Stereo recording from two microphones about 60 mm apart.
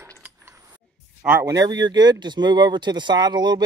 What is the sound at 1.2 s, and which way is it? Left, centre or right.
Speech, centre.